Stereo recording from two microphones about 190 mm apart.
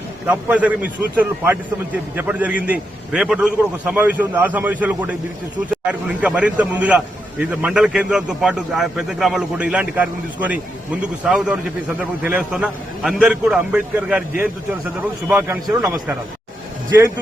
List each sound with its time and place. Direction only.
0.3 s a man's voice: 10° right (ahead or behind)